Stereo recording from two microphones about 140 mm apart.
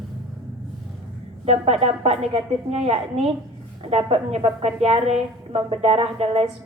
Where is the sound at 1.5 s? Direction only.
50° right (ahead or behind).